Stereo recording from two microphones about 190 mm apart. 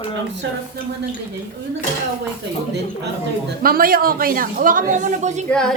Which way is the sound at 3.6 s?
50° right (ahead or behind).